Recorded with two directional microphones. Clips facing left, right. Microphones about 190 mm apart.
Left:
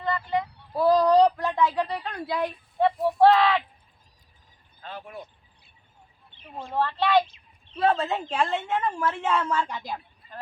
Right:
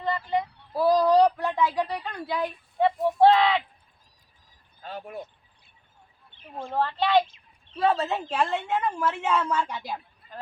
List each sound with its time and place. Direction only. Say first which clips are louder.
0.7 s a sound: left 1 dB; 5° right (ahead or behind)
1.7 s speech: even; 10° right (ahead or behind)
2.0 s a woman's voice: left 1 dB; 5° left (ahead or behind)
2.7 s speech: even; 15° right (ahead or behind)
6.6 s speech: even; 15° right (ahead or behind)
7.7 s a woman's voice: even; 5° right (ahead or behind)